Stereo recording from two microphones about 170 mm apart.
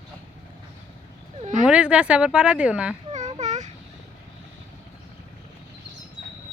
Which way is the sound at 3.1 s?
45° right (ahead or behind).